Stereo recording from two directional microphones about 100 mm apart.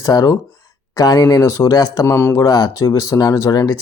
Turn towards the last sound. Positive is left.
turn(degrees=35)  # may be behind; listen again after turning